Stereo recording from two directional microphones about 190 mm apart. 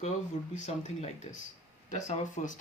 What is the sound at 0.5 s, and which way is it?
Speech, 40° left (ahead or behind).